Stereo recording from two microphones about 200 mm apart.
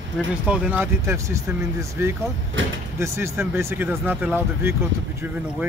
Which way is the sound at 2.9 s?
15° right (ahead or behind).